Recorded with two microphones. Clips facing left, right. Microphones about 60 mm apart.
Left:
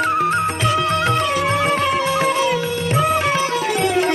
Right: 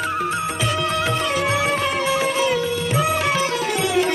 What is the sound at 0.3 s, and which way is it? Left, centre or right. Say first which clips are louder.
Music: left 4 dB; left.